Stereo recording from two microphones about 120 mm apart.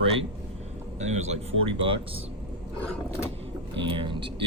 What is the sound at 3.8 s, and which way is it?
Speech, 45° right (ahead or behind).